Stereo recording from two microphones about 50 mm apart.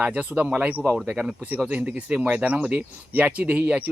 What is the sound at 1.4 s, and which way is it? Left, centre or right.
Speech, right.